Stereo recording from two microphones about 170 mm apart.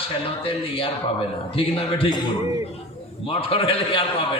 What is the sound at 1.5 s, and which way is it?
Speech, 35° left (ahead or behind).